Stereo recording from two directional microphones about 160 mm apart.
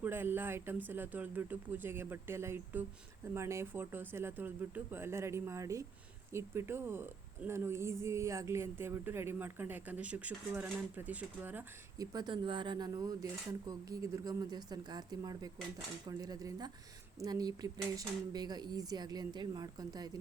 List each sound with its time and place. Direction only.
0.0 s a woman's voice: 15° right (ahead or behind)
12.1 s speech: 30° right (ahead or behind)